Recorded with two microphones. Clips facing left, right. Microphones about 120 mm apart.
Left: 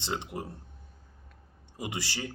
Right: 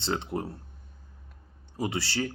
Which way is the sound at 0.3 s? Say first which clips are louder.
Right 6 dB; 40° right (ahead or behind).